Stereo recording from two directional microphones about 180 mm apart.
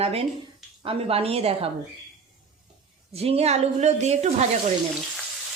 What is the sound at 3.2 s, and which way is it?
A man's voice, 35° right (ahead or behind).